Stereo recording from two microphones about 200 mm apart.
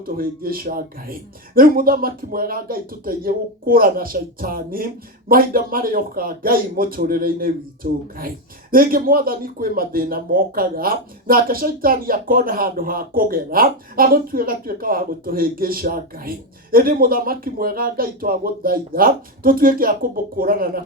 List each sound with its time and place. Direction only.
0.0 s speech: 45° right (ahead or behind)